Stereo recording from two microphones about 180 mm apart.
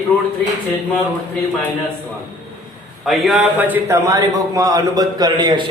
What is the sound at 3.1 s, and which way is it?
A man's voice, centre (ahead or behind).